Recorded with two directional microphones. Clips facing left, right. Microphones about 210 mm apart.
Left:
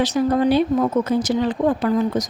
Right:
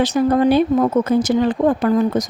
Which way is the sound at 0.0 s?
55° right (ahead or behind).